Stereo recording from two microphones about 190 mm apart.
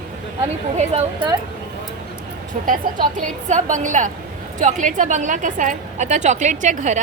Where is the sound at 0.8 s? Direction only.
35° right (ahead or behind).